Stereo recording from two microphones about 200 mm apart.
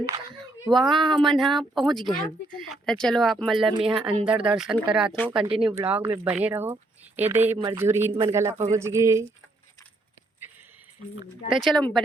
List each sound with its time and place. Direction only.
0.0 s a sound: 15° right (ahead or behind)
0.7 s speech: centre (ahead or behind)
3.7 s speech: 25° right (ahead or behind)
4.3 s speech: 5° right (ahead or behind)
5.4 s speech: 25° right (ahead or behind)
5.7 s speech: 10° right (ahead or behind)
11.4 s speech: centre (ahead or behind)